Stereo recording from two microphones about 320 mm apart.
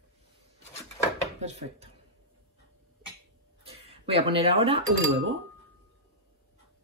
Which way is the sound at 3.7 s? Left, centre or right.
Centre.